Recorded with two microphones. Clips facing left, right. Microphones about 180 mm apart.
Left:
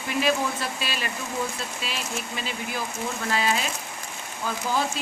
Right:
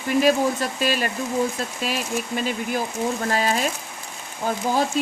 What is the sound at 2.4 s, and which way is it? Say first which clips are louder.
Speech: right 7 dB; 45° right (ahead or behind).